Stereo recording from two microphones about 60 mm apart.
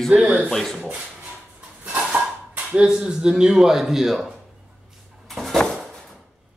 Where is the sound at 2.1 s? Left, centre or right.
Centre.